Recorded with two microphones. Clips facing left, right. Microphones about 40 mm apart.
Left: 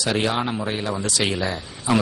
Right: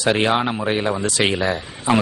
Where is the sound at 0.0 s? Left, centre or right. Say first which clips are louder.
Right 4 dB; right.